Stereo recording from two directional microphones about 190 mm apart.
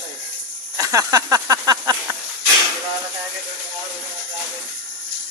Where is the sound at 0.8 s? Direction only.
20° right (ahead or behind).